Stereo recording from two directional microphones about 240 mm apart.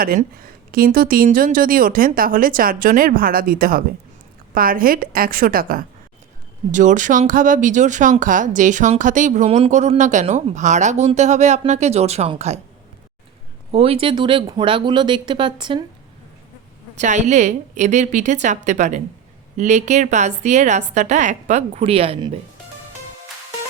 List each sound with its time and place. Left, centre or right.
0.0 s speech: right
13.7 s a woman's voice: right
17.0 s a woman's voice: right